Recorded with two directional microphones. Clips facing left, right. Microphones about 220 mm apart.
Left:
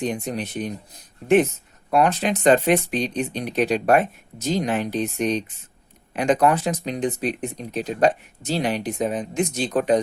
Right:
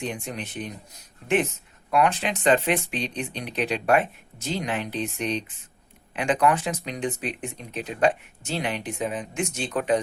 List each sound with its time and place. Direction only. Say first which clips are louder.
0.0 s speech: left 6 dB; 40° left (ahead or behind)
1.9 s speech: left 3 dB; 35° left (ahead or behind)